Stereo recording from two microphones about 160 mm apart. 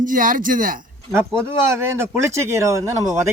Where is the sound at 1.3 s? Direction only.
15° right (ahead or behind).